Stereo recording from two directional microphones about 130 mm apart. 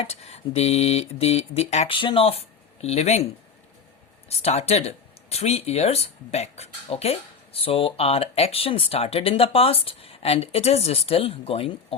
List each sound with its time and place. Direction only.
0.0 s speech: 50° left (ahead or behind)
1.9 s speech: 40° left (ahead or behind)
2.8 s speech: 55° left (ahead or behind)
4.3 s speech: 55° left (ahead or behind)